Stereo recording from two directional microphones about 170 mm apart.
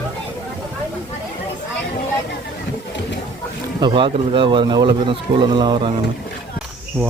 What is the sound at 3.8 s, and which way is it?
Speech, 30° right (ahead or behind).